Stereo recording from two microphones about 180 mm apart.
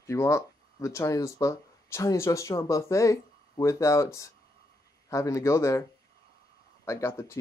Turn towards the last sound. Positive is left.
turn(degrees=15)  # may be behind; listen again after turning